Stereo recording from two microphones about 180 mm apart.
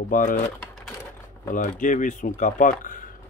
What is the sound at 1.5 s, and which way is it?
Speech, 45° left (ahead or behind).